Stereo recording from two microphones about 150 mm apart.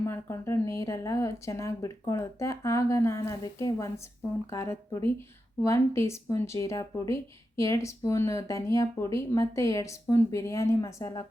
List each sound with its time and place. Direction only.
0.0 s speech: 20° left (ahead or behind)